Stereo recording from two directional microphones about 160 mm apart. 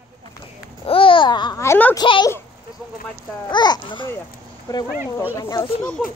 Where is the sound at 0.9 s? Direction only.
35° left (ahead or behind).